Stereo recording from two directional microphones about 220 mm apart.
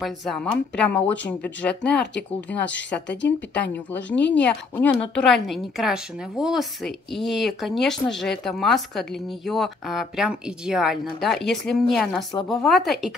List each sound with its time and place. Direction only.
0.0 s a woman's voice: centre (ahead or behind)
3.1 s speech: 50° left (ahead or behind)
4.4 s a woman's voice: 5° left (ahead or behind)